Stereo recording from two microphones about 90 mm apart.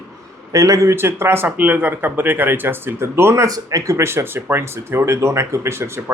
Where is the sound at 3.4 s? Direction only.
40° right (ahead or behind).